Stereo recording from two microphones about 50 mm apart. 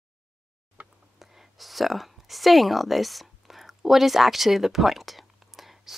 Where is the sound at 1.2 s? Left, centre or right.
Centre.